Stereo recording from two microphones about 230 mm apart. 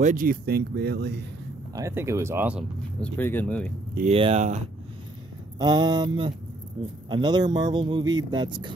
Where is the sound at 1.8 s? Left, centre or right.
Centre.